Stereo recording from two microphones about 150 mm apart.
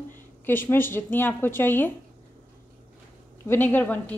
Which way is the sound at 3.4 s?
15° left (ahead or behind).